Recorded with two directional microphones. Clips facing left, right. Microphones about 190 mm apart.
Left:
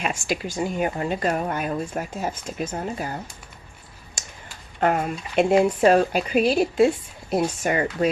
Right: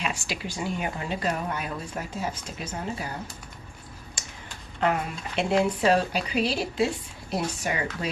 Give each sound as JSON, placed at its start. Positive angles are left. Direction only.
{"t": 0.0, "sound": "speech", "side_deg": 45}
{"t": 4.8, "sound": "speech", "side_deg": 50}